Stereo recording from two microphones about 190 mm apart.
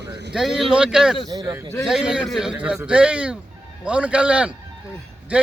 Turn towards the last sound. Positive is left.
turn(degrees=-5)  # may be behind; listen again after turning